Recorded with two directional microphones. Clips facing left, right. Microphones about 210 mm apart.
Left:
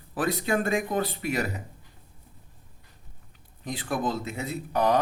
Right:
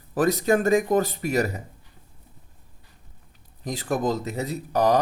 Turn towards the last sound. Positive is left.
turn(degrees=-40)  # may be behind; listen again after turning